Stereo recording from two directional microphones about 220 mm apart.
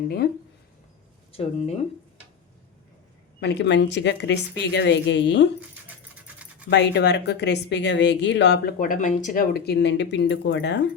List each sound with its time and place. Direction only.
1.3 s speech: 25° left (ahead or behind)
3.4 s speech: 50° left (ahead or behind)
6.2 s scratch: 5° right (ahead or behind)
6.7 s speech: 50° left (ahead or behind)